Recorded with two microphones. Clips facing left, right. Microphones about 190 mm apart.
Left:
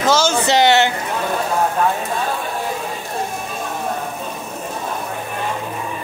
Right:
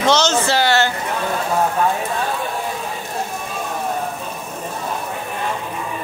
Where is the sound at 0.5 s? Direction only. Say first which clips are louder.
Left 3 dB; 20° left (ahead or behind).